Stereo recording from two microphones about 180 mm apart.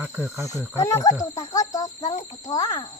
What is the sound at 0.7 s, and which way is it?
Speech, 15° left (ahead or behind).